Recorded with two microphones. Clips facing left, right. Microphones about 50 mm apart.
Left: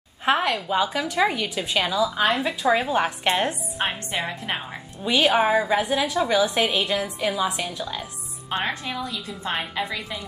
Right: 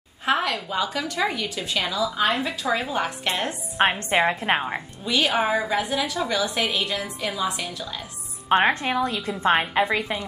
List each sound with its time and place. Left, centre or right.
0.2 s a woman's voice: centre
4.1 s a woman's voice: right
5.0 s a woman's voice: centre
8.5 s a woman's voice: right